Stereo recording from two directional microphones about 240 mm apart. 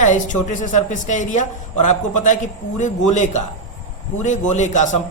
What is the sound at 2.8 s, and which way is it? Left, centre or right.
A woman's voice, left.